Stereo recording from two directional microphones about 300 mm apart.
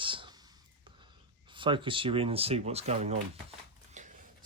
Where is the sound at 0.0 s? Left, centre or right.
Centre.